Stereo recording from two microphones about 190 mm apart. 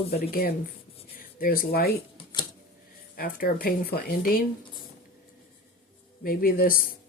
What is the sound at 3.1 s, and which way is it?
Speech, 50° left (ahead or behind).